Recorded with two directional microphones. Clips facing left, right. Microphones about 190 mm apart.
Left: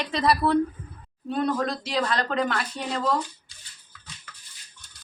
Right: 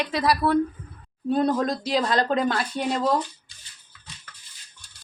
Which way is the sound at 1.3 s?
35° right (ahead or behind).